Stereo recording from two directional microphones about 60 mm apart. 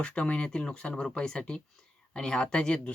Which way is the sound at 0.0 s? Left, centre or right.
Centre.